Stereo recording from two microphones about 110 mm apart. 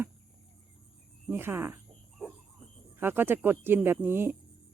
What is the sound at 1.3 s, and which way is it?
Speech, 20° right (ahead or behind).